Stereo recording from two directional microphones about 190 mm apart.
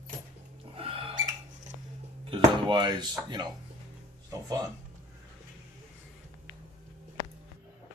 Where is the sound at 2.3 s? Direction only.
25° right (ahead or behind).